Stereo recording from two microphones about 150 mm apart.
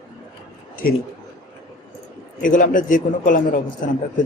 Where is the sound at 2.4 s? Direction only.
60° left (ahead or behind).